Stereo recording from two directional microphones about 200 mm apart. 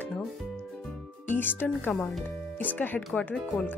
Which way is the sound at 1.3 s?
10° left (ahead or behind).